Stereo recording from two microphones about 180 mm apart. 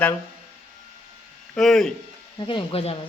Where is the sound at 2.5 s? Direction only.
30° left (ahead or behind).